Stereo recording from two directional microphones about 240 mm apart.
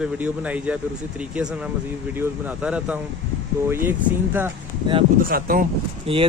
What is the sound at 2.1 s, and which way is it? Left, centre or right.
Speech, centre.